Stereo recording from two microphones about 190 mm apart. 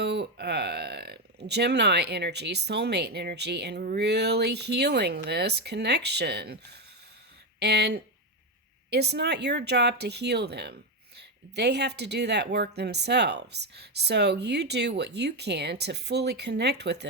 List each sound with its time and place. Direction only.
0.0 s speech: 60° right (ahead or behind)